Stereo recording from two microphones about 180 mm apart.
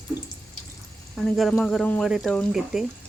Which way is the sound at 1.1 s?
Centre (ahead or behind).